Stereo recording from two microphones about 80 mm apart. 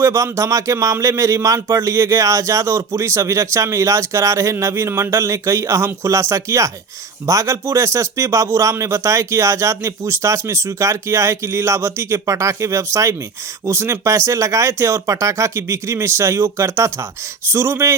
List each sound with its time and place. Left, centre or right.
0.0 s speech: right